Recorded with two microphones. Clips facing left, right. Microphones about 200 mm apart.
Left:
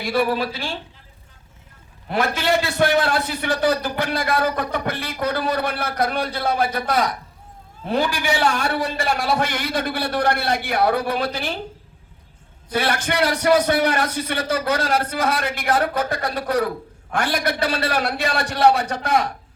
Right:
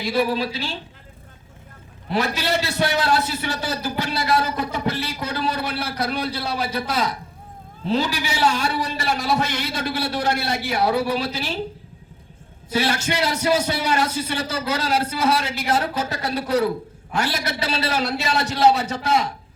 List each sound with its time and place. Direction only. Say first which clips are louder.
0.0 s a man's voice: left 1 dB; 55° left (ahead or behind)
2.0 s a man's voice: left 2 dB; 50° left (ahead or behind)
12.7 s a man's voice: even; 55° left (ahead or behind)